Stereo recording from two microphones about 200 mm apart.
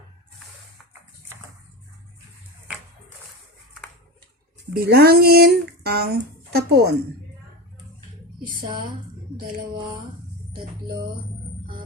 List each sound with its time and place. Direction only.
4.7 s speech: 50° right (ahead or behind)